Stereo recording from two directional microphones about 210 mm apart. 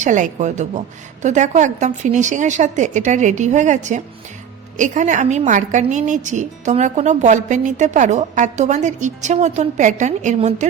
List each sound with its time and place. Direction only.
0.0 s a woman's voice: 35° right (ahead or behind)